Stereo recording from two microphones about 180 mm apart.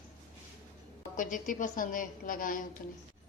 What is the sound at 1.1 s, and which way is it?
A woman's voice, 45° left (ahead or behind).